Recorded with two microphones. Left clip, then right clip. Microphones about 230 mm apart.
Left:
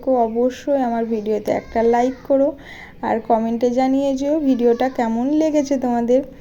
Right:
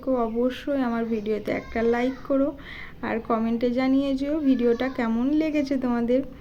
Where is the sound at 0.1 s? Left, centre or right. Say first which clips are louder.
Left 7 dB; centre.